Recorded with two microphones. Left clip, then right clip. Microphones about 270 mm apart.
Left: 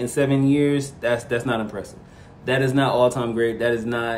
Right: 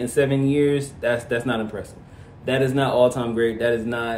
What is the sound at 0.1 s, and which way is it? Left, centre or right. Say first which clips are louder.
Speech: even; centre.